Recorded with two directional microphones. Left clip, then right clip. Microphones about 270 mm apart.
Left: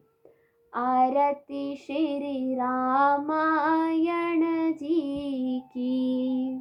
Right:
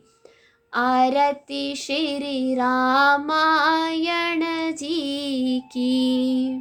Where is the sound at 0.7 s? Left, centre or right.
Centre.